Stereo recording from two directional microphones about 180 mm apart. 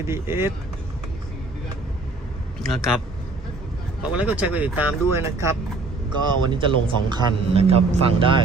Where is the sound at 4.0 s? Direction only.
5° right (ahead or behind).